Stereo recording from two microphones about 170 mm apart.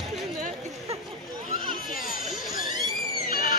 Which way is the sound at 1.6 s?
55° left (ahead or behind).